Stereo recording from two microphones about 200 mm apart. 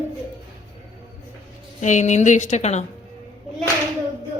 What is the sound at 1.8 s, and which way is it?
A woman's voice, 35° left (ahead or behind).